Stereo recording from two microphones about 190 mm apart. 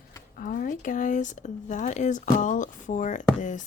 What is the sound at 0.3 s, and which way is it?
Speech, 45° left (ahead or behind).